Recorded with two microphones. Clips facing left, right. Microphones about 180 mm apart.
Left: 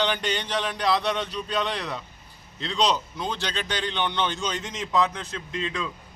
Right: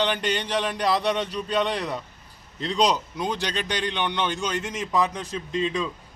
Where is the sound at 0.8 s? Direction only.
35° right (ahead or behind).